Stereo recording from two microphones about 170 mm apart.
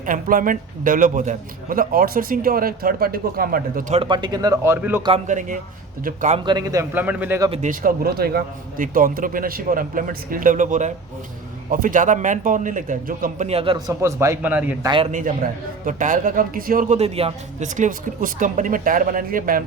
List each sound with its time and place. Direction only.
0.0 s a man's voice: 50° right (ahead or behind)
3.9 s a man's voice: 30° right (ahead or behind); by 5.0 s 15° right (ahead or behind)
5.3 s speech: 45° right (ahead or behind)
6.4 s a man's voice: 25° right (ahead or behind)
7.6 s a man's voice: 50° right (ahead or behind)
13.5 s a man's voice: 35° right (ahead or behind)
13.7 s a man's voice: 20° right (ahead or behind)
14.8 s a man's voice: 30° right (ahead or behind)
15.9 s speech: 50° right (ahead or behind)
17.0 s a man's voice: 35° right (ahead or behind)
17.7 s speech: 50° right (ahead or behind)